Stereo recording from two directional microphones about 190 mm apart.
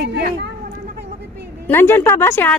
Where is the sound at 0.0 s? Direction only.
60° right (ahead or behind).